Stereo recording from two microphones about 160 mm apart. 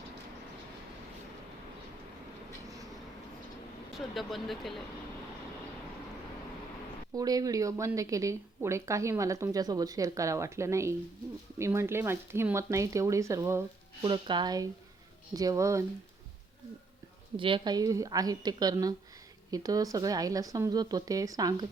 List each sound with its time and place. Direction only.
4.1 s speech: centre (ahead or behind)
7.1 s speech: 25° right (ahead or behind)
14.0 s speech: 30° right (ahead or behind)
17.3 s speech: 30° right (ahead or behind)